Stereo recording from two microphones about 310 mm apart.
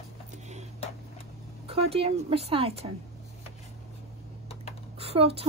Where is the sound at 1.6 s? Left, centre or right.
Centre.